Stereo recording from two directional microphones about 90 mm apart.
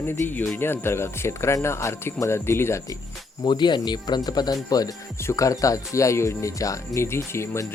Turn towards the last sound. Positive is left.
turn(degrees=30)  # may be behind; listen again after turning